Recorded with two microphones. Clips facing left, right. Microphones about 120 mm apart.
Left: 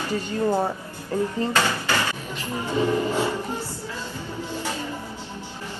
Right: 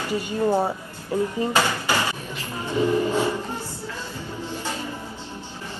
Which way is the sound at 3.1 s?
15° right (ahead or behind).